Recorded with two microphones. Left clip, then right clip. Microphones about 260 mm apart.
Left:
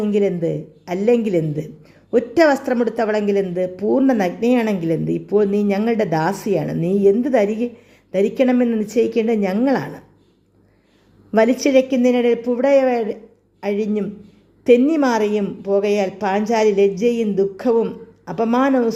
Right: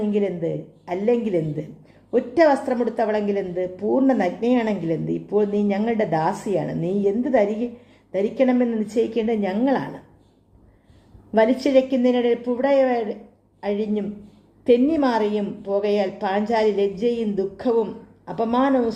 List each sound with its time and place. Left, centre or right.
0.0 s a woman's voice: left
11.3 s a woman's voice: left